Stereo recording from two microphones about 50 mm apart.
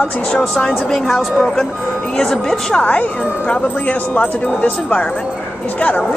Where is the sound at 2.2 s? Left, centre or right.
Centre.